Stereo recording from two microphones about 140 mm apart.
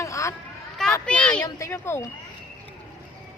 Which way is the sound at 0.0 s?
20° left (ahead or behind).